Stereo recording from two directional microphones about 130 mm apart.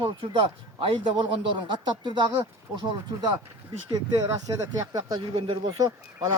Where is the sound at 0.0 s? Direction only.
40° right (ahead or behind).